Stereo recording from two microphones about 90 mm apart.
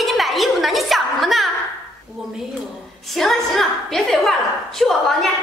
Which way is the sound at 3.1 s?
5° left (ahead or behind).